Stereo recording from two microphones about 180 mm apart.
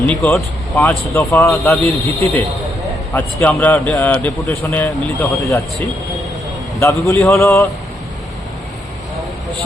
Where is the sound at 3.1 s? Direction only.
10° left (ahead or behind).